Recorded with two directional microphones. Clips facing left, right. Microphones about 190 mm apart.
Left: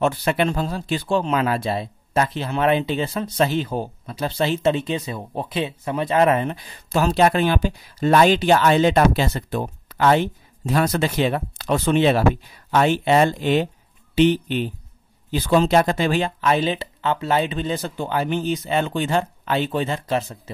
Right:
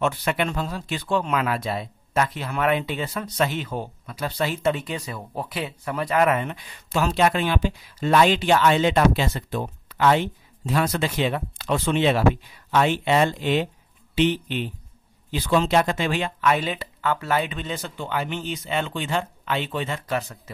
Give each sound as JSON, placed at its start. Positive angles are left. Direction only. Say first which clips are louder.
{"t": 0.0, "sound": "speech", "louder": "left 4 dB", "side_deg": 35}